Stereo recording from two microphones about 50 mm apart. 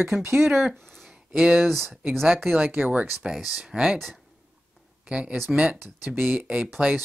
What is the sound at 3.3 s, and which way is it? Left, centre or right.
Speech, centre.